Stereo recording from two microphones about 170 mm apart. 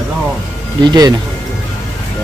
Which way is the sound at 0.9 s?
25° right (ahead or behind).